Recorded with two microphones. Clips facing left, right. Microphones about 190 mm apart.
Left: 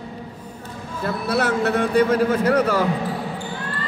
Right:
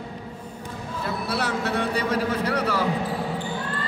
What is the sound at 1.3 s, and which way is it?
A man's voice, 50° left (ahead or behind).